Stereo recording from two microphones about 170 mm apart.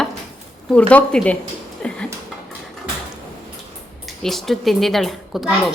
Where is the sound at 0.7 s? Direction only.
5° left (ahead or behind).